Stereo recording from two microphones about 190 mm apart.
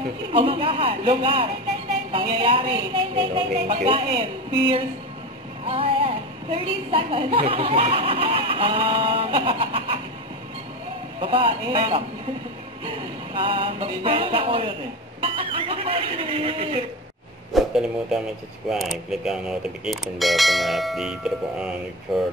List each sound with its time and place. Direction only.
0.3 s a woman's voice: 30° right (ahead or behind)
11.1 s a woman's voice: 30° right (ahead or behind)
17.5 s speech: centre (ahead or behind)